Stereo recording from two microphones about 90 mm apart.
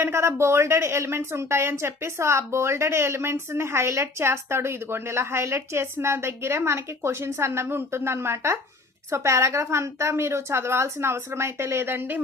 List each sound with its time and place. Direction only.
0.0 s a woman's voice: 30° right (ahead or behind)